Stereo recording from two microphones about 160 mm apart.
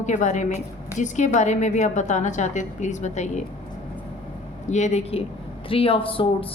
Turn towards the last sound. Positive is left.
turn(degrees=35)  # may be behind; listen again after turning